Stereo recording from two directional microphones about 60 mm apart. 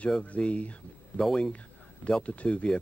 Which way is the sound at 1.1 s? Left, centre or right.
Centre.